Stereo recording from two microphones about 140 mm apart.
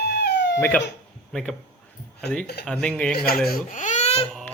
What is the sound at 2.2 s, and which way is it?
Speech, 5° left (ahead or behind).